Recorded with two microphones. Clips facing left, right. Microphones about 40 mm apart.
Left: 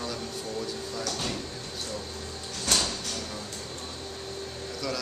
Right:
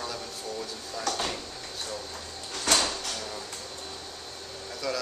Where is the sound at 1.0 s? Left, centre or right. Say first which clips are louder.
Right 5 dB; right.